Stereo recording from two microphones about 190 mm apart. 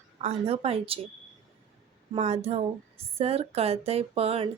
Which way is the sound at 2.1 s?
35° right (ahead or behind).